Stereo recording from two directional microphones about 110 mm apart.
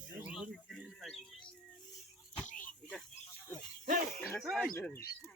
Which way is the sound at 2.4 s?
10° left (ahead or behind).